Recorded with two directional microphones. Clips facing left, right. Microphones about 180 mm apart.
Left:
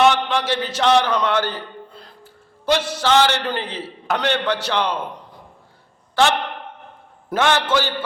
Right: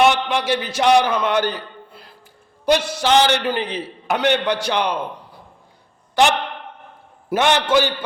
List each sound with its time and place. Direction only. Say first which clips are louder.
0.0 s a man's voice: even; 15° right (ahead or behind)
7.3 s a man's voice: right 2 dB; 15° right (ahead or behind)